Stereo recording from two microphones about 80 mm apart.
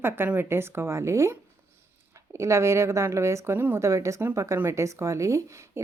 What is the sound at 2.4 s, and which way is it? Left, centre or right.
Speech, right.